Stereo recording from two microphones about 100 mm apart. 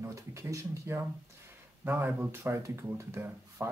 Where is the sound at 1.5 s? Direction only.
20° right (ahead or behind).